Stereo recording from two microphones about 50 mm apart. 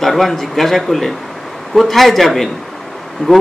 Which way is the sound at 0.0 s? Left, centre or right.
Centre.